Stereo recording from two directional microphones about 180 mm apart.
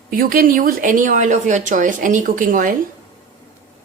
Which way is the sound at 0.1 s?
50° right (ahead or behind).